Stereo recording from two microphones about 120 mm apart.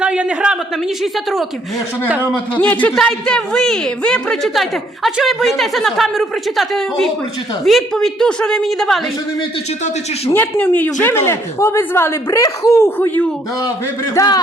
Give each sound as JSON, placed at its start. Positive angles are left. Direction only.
{"t": 0.0, "sound": "a sound", "side_deg": -10}
{"t": 2.0, "sound": "a man's voice", "side_deg": -15}
{"t": 2.6, "sound": "speech", "side_deg": 10}
{"t": 10.3, "sound": "speech", "side_deg": 20}
{"t": 14.1, "sound": "speech", "side_deg": 30}